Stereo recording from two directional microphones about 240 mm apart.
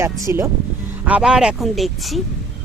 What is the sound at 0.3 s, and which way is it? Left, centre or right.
Speech, centre.